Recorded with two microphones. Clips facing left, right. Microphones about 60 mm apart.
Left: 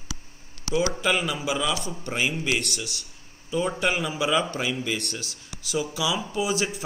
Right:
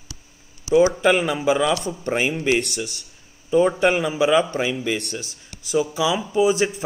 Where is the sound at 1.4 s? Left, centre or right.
Right.